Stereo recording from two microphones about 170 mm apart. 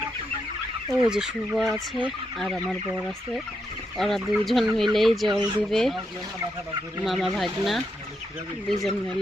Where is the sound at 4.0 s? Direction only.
Centre (ahead or behind).